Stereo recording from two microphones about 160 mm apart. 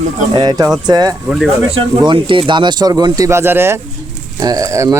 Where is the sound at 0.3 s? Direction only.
25° right (ahead or behind).